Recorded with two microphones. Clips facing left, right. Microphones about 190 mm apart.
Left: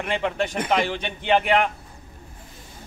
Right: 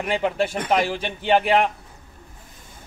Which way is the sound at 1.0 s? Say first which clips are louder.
Right 1 dB; 35° right (ahead or behind).